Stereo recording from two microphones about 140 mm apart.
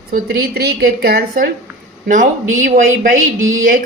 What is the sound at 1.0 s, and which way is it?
Speech, 90° right.